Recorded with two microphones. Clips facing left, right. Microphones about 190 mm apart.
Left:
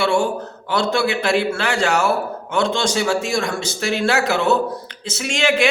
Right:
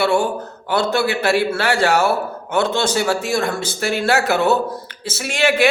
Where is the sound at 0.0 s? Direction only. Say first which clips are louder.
Right 1 dB; 5° right (ahead or behind).